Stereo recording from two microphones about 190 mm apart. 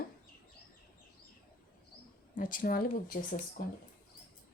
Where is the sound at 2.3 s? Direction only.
45° left (ahead or behind).